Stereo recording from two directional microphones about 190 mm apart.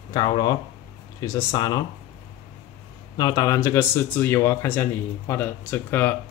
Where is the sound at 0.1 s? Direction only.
20° left (ahead or behind).